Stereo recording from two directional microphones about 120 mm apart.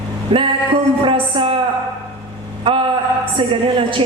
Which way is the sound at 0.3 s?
45° right (ahead or behind).